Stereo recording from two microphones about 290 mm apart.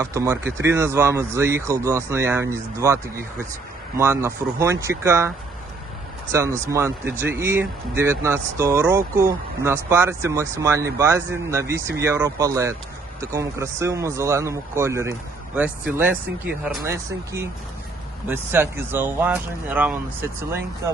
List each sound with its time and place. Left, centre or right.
0.0 s speech: centre
6.3 s speech: centre